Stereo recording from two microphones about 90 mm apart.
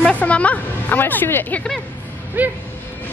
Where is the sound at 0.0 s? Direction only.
15° left (ahead or behind).